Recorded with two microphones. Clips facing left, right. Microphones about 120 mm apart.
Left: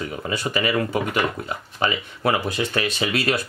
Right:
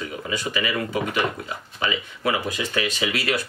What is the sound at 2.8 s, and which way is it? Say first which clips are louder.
Speech: even; 40° left (ahead or behind).